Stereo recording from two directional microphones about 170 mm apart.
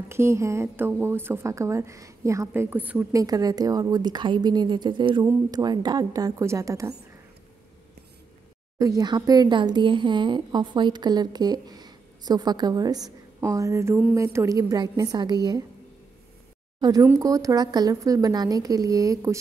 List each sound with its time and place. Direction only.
0.1 s speech: 15° right (ahead or behind)
8.7 s speech: 20° right (ahead or behind)
16.8 s speech: 20° right (ahead or behind)